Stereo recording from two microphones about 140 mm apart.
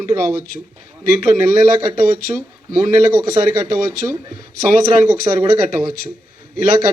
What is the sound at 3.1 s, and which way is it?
Speech, 25° right (ahead or behind).